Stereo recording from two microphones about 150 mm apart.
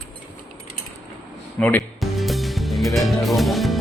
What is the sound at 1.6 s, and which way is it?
Cutlery, 10° left (ahead or behind).